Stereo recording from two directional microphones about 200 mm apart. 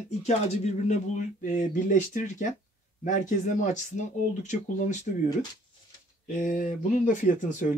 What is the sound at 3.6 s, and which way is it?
Speech, 35° left (ahead or behind).